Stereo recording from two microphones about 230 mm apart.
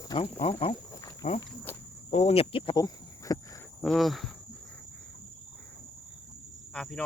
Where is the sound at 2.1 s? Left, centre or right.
Left.